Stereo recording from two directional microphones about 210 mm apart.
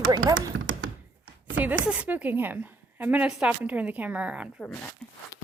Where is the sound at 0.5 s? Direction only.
70° right (ahead or behind).